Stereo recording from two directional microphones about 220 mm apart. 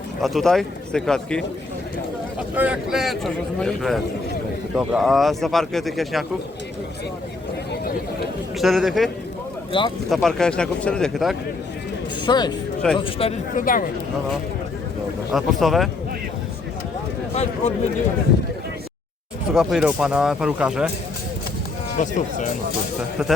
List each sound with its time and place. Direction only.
0.2 s speech: centre (ahead or behind)
2.6 s speech: 5° right (ahead or behind)
8.5 s speech: centre (ahead or behind)
9.7 s a man's voice: 20° left (ahead or behind)
10.1 s speech: centre (ahead or behind)
12.2 s a man's voice: 20° left (ahead or behind); by 13.9 s 40° left (ahead or behind)
15.3 s speech: centre (ahead or behind)
17.3 s speech: 30° left (ahead or behind)
19.5 s speech: centre (ahead or behind)
21.9 s speech: 35° left (ahead or behind)